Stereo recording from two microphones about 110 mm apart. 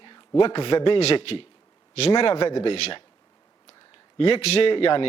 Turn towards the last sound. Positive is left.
turn(degrees=55)  # may be behind; listen again after turning